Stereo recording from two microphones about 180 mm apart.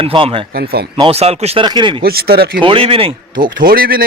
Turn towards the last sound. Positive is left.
turn(degrees=-55)  # may be behind; listen again after turning